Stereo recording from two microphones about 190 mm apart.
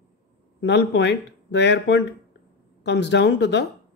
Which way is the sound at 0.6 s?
65° left (ahead or behind).